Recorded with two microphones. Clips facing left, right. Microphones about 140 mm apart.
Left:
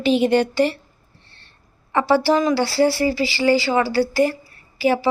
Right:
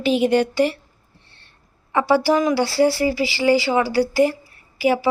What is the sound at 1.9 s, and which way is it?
Speech, 15° right (ahead or behind).